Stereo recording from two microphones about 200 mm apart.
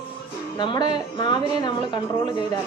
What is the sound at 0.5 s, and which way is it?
A woman's voice, 20° left (ahead or behind).